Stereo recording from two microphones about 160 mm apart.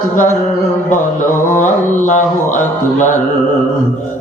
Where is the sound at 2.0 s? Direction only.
50° left (ahead or behind).